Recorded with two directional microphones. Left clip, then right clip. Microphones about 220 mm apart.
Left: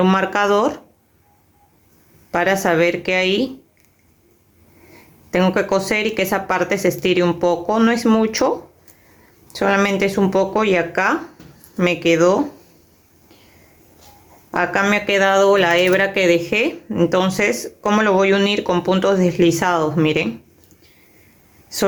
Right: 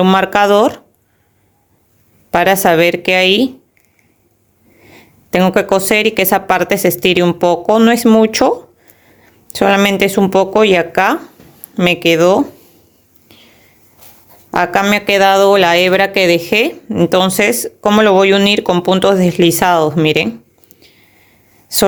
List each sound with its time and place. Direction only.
0.0 s speech: 45° right (ahead or behind)
2.3 s speech: 45° right (ahead or behind)
5.3 s speech: 40° right (ahead or behind)
14.5 s speech: 45° right (ahead or behind)
21.7 s speech: 45° right (ahead or behind)